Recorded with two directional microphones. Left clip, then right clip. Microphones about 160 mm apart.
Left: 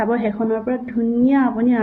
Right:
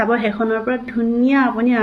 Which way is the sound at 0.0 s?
15° right (ahead or behind).